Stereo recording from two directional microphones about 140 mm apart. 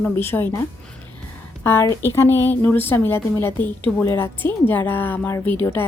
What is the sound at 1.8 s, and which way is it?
A woman's voice, 20° left (ahead or behind).